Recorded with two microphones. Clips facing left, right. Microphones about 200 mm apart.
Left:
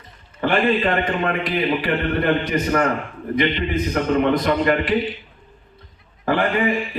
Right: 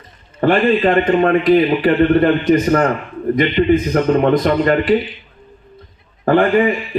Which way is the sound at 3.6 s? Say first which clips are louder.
Right 8 dB; 50° right (ahead or behind).